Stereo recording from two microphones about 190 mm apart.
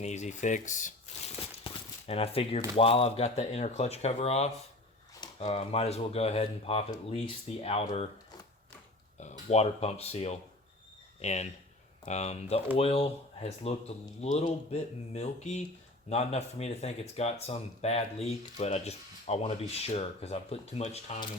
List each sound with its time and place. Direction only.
0.0 s speech: 35° left (ahead or behind)
9.5 s speech: 35° left (ahead or behind)